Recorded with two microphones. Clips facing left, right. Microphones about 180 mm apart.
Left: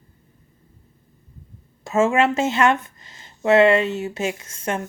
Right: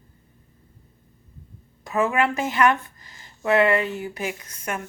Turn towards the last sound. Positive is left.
turn(degrees=25)  # may be behind; listen again after turning